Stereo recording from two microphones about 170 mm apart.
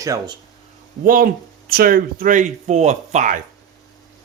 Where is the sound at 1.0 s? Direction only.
55° right (ahead or behind).